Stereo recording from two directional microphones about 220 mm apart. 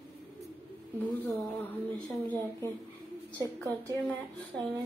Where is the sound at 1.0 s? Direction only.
10° left (ahead or behind).